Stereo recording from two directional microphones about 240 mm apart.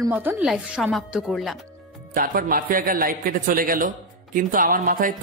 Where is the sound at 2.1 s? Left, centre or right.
Right.